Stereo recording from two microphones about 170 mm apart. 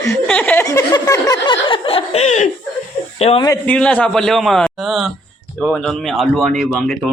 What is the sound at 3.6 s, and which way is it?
Speech, 10° left (ahead or behind).